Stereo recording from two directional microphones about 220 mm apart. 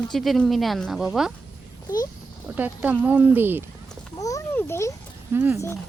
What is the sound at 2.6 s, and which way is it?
Speech, 5° right (ahead or behind).